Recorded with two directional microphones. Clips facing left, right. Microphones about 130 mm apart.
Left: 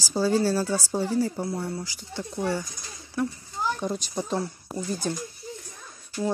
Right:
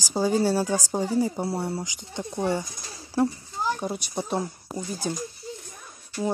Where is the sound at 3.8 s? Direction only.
10° right (ahead or behind).